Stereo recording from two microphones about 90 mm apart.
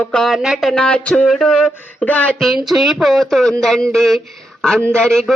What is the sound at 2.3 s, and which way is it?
Speech, centre (ahead or behind).